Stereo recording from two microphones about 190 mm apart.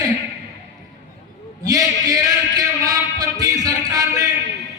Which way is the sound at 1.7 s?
20° right (ahead or behind).